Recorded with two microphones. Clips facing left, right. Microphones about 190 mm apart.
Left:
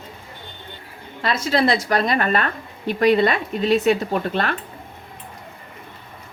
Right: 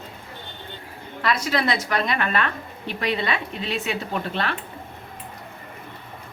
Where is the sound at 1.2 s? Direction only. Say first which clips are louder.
Left 4 dB; 25° left (ahead or behind); by 4.5 s 45° left (ahead or behind).